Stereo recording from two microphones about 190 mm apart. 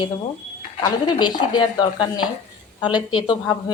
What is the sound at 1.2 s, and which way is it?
A woman's voice, 20° left (ahead or behind).